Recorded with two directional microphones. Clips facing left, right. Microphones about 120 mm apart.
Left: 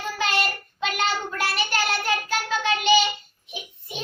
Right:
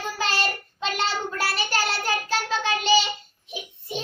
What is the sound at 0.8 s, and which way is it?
Child singing, 35° right (ahead or behind).